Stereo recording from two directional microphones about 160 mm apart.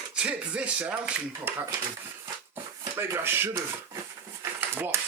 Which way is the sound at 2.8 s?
15° right (ahead or behind).